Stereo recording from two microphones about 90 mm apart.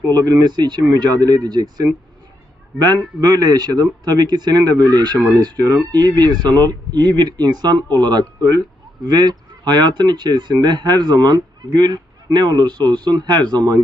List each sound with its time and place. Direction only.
0.1 s speech: 45° right (ahead or behind)